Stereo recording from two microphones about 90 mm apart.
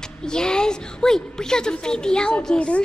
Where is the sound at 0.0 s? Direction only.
10° left (ahead or behind).